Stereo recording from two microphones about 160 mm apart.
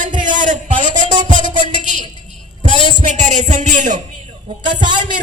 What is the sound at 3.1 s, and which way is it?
Speech, 50° right (ahead or behind).